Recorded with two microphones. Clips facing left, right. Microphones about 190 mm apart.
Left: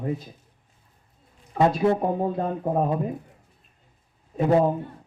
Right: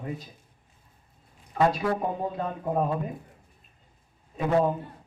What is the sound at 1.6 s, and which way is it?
Speech, 25° left (ahead or behind).